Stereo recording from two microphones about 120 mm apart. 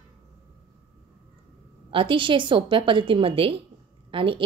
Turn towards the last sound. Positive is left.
turn(degrees=-45)  # may be behind; listen again after turning